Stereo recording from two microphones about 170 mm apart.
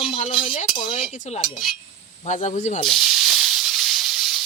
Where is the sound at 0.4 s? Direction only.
35° left (ahead or behind).